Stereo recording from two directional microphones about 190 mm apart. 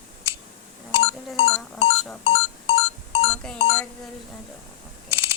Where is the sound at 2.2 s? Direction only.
30° left (ahead or behind).